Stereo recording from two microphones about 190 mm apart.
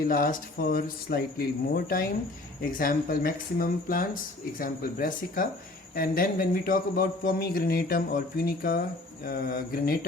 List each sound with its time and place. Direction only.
0.1 s speech: 50° left (ahead or behind)